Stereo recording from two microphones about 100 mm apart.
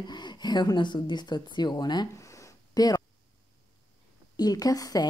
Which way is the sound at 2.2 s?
30° left (ahead or behind).